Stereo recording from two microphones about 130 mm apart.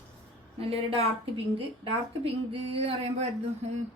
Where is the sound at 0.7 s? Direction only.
50° right (ahead or behind).